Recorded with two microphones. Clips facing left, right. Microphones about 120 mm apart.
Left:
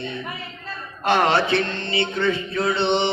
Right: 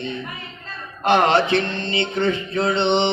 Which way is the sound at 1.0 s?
20° right (ahead or behind).